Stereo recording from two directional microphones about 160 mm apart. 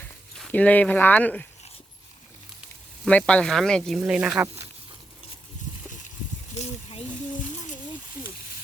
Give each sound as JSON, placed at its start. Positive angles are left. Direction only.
{"t": 0.3, "sound": "speech", "side_deg": 10}
{"t": 3.0, "sound": "speech", "side_deg": 5}
{"t": 6.5, "sound": "a sound", "side_deg": 45}